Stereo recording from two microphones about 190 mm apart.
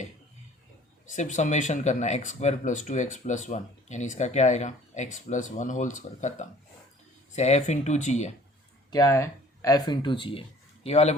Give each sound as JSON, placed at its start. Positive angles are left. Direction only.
{"t": 1.1, "sound": "speech", "side_deg": 40}
{"t": 8.9, "sound": "speech", "side_deg": 20}